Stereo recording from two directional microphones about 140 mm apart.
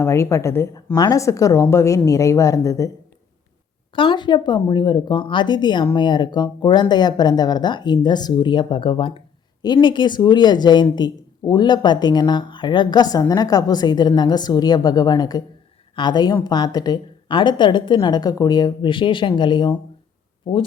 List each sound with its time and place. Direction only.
0.0 s a woman's voice: 20° left (ahead or behind)
3.9 s a woman's voice: 35° left (ahead or behind)